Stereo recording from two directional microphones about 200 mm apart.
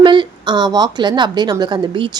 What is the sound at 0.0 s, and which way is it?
A woman's voice, 25° right (ahead or behind).